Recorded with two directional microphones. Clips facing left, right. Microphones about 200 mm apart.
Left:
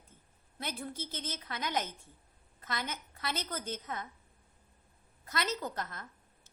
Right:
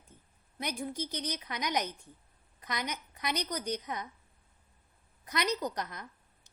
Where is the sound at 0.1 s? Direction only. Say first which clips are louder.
Right 3 dB; 15° right (ahead or behind).